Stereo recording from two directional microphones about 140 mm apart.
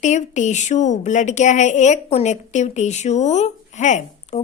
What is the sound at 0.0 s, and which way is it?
A woman's voice, 60° left (ahead or behind).